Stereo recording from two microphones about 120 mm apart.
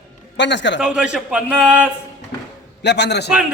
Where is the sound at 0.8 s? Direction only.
10° right (ahead or behind).